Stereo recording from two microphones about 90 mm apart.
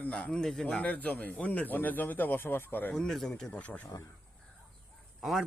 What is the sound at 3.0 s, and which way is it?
Speech, 5° left (ahead or behind).